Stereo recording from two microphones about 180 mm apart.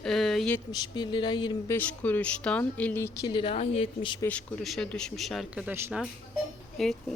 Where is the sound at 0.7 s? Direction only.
25° left (ahead or behind).